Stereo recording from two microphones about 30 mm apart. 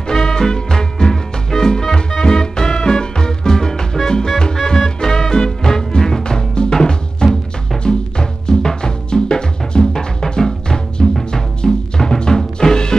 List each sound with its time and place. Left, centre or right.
0.1 s music: centre